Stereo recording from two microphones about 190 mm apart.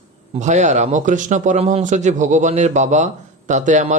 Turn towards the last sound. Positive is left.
turn(degrees=-40)  # may be behind; listen again after turning